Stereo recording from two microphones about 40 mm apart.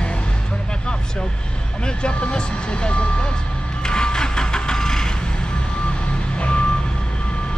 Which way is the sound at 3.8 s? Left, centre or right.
Centre.